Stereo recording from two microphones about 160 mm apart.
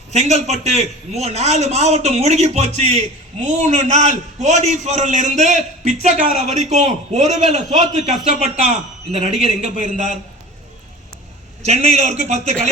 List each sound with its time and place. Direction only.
0.1 s a man's voice: 45° right (ahead or behind)
11.6 s a man's voice: 45° right (ahead or behind)